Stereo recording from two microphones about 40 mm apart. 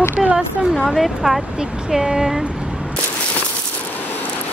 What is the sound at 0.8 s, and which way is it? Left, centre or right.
Speech, centre.